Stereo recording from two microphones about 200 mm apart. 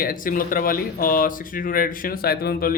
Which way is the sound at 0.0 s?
45° left (ahead or behind).